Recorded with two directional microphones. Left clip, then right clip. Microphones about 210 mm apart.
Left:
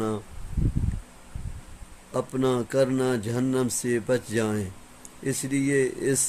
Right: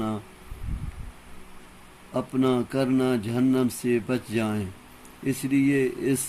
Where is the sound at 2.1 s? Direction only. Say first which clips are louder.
Right 1 dB; 45° left (ahead or behind).